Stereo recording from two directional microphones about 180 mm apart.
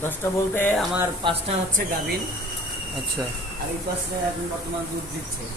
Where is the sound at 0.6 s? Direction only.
10° left (ahead or behind).